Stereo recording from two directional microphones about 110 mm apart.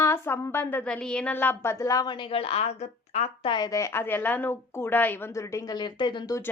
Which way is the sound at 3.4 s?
40° left (ahead or behind).